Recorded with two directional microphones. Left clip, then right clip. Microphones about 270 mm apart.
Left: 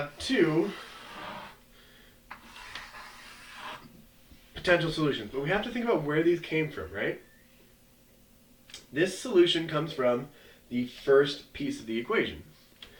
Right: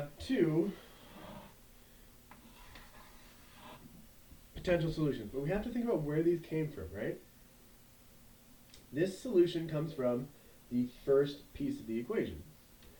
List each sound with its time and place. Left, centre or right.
0.0 s a sound: centre
4.5 s speech: centre
9.0 s speech: centre